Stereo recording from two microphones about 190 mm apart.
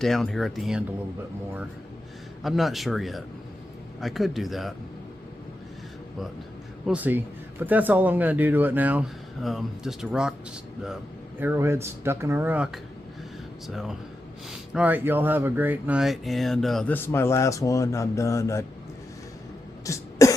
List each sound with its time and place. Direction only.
0.0 s speech: centre (ahead or behind)
2.4 s speech: centre (ahead or behind)
6.8 s speech: 10° right (ahead or behind)
11.3 s speech: 10° right (ahead or behind); by 18.6 s 15° left (ahead or behind)
19.8 s cough: 15° left (ahead or behind)